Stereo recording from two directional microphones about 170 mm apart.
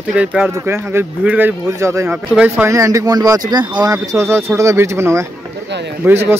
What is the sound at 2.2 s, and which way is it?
Speech, 5° right (ahead or behind).